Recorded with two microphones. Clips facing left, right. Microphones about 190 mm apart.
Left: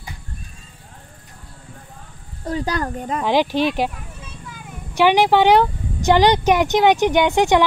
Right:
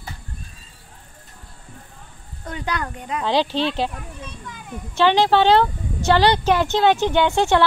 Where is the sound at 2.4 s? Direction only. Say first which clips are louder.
Left 5 dB; 35° left (ahead or behind).